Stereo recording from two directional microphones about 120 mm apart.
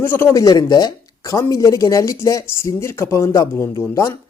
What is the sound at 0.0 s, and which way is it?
A man's voice, 20° left (ahead or behind).